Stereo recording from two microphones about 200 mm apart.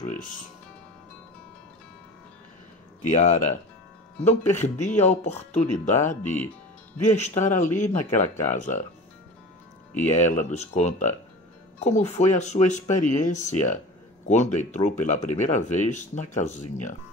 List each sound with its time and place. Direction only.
0.0 s music: 40° left (ahead or behind)
3.1 s speech: 40° left (ahead or behind)
4.6 s speech: 35° left (ahead or behind)
6.2 s speech: 10° left (ahead or behind)
7.1 s speech: 35° left (ahead or behind)
9.9 s speech: 35° left (ahead or behind)